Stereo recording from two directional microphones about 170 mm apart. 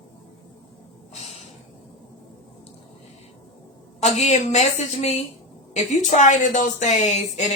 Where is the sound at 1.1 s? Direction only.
40° left (ahead or behind).